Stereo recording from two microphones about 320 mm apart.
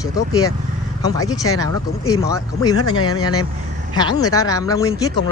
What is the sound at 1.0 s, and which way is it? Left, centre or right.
Speech, centre.